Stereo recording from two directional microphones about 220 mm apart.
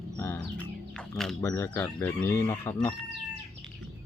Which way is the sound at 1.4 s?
10° left (ahead or behind).